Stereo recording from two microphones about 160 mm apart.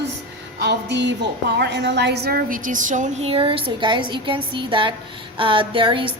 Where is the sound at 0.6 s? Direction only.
90° right.